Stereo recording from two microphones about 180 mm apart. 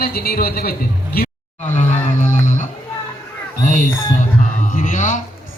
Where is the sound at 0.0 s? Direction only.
55° left (ahead or behind).